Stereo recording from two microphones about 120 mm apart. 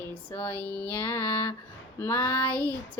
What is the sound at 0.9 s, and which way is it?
Mantra, 15° left (ahead or behind).